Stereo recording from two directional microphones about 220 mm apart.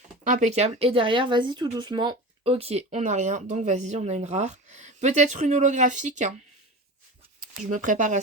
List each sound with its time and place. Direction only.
0.3 s speech: 35° right (ahead or behind)
7.6 s speech: 35° right (ahead or behind)